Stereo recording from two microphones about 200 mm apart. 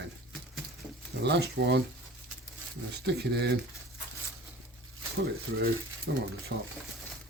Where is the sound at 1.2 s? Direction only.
55° right (ahead or behind).